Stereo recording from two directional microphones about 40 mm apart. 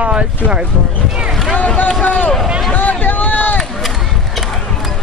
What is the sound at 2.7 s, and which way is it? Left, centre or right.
Run, left.